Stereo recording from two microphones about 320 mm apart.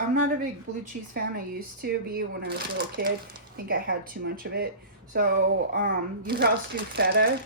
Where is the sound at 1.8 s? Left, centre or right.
Right.